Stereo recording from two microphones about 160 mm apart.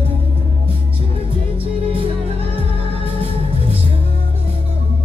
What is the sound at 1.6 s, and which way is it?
Music, 35° right (ahead or behind).